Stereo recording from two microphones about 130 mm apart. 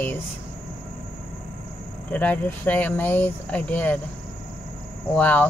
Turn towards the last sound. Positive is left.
turn(degrees=10)  # may be behind; listen again after turning